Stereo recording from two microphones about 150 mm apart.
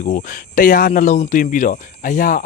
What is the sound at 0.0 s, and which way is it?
Speech, 60° left (ahead or behind).